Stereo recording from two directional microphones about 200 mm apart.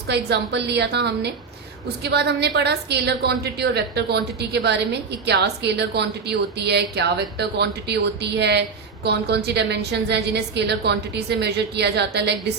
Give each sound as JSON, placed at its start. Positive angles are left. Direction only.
{"t": 0.1, "sound": "a woman's voice", "side_deg": -55}